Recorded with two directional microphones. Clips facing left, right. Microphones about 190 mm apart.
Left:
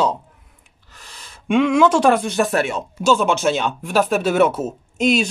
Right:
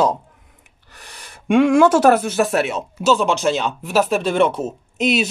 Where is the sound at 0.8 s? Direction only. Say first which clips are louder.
Right 2 dB; 60° right (ahead or behind).